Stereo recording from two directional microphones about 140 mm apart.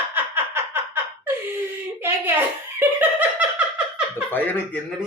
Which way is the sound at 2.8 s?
15° right (ahead or behind).